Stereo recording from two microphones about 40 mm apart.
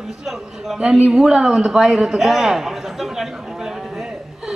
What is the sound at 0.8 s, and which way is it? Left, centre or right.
A man's voice, right.